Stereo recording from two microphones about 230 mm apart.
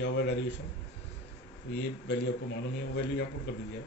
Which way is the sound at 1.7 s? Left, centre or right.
Left.